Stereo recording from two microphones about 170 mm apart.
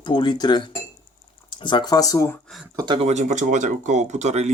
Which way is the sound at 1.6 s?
25° left (ahead or behind).